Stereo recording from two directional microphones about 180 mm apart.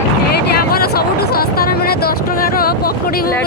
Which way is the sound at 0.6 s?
55° left (ahead or behind).